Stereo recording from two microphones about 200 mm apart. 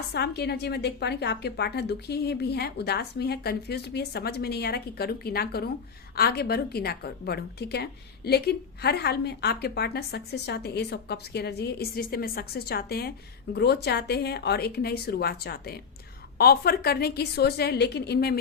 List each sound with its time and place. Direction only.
0.1 s a woman's voice: 55° left (ahead or behind)